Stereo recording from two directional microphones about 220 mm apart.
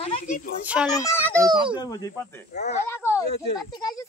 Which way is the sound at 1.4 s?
20° right (ahead or behind).